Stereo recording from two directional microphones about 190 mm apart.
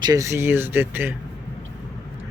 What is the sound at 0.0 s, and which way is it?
Speech, 20° right (ahead or behind).